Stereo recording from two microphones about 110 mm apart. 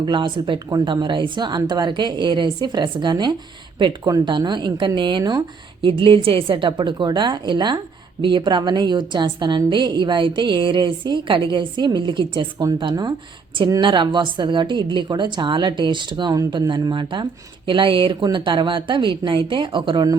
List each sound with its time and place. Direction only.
0.0 s a woman's voice: 45° right (ahead or behind)
5.8 s a woman's voice: 55° right (ahead or behind)